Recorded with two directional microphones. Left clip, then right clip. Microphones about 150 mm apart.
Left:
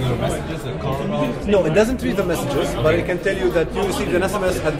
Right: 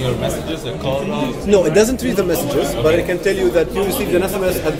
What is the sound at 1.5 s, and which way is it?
A man's voice, 10° right (ahead or behind).